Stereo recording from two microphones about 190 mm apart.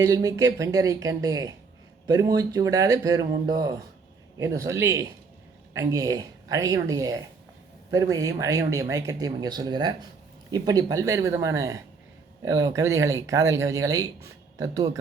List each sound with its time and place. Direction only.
0.0 s speech: 20° right (ahead or behind)